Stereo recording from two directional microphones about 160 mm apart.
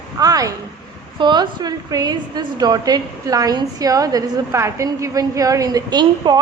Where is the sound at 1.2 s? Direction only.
25° right (ahead or behind).